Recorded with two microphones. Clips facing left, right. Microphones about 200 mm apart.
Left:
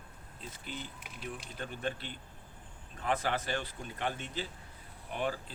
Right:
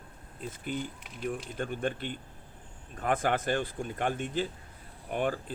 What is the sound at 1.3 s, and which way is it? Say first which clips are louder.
Speech: right 8 dB; 50° right (ahead or behind).